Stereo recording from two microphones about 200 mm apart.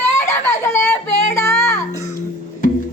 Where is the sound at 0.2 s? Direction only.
15° left (ahead or behind).